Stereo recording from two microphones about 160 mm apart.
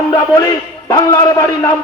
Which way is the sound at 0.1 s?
20° left (ahead or behind).